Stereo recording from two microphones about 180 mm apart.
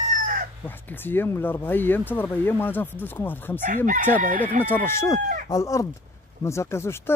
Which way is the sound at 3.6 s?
45° right (ahead or behind).